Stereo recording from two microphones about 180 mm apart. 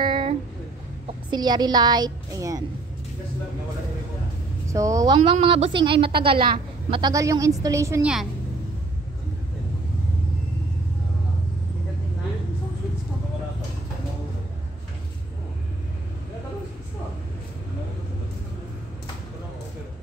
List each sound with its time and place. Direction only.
0.0 s a sound: 25° right (ahead or behind)
1.3 s a woman's voice: 25° right (ahead or behind)
4.6 s a woman's voice: 15° right (ahead or behind)